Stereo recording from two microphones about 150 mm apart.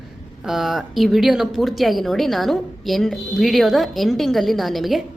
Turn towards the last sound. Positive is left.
turn(degrees=0)  # may be behind; listen again after turning